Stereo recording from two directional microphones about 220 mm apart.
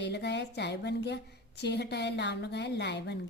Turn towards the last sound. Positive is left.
turn(degrees=50)  # may be behind; listen again after turning